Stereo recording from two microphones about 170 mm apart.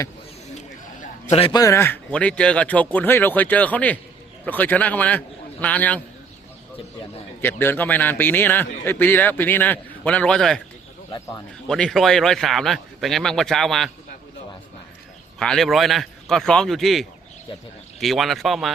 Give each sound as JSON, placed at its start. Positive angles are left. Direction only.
{"t": 0.5, "sound": "a sound", "side_deg": 40}
{"t": 1.5, "sound": "a man's voice", "side_deg": 15}
{"t": 7.4, "sound": "a man's voice", "side_deg": 10}
{"t": 11.7, "sound": "speech", "side_deg": 0}
{"t": 15.4, "sound": "speech", "side_deg": 5}